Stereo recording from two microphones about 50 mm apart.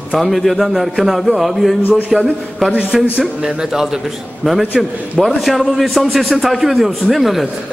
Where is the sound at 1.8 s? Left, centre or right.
Left.